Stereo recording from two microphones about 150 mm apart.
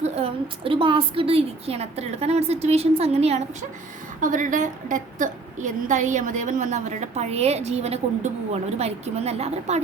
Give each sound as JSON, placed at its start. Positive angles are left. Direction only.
{"t": 0.0, "sound": "a woman's voice", "side_deg": -40}
{"t": 4.2, "sound": "a woman's voice", "side_deg": -60}